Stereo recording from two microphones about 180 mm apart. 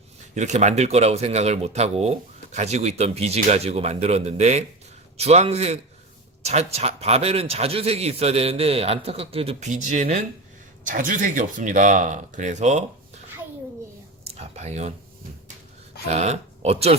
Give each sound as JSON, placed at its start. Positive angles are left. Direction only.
{"t": 0.3, "sound": "speech", "side_deg": -40}
{"t": 14.3, "sound": "a sound", "side_deg": -35}
{"t": 16.0, "sound": "speech", "side_deg": -40}